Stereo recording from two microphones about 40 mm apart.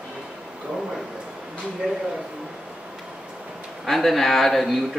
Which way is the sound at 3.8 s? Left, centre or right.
Centre.